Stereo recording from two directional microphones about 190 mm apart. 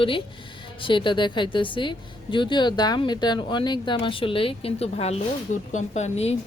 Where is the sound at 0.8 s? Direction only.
25° left (ahead or behind).